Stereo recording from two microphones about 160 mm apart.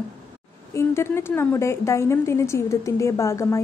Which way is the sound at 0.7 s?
15° left (ahead or behind).